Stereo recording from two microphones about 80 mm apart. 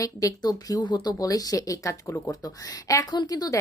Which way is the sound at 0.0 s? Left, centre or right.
Left.